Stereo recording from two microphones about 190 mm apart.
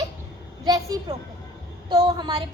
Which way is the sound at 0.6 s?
20° right (ahead or behind).